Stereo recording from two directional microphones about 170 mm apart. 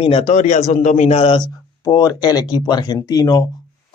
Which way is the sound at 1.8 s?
20° left (ahead or behind).